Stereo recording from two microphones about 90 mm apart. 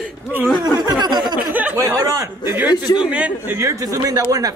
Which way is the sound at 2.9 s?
10° right (ahead or behind).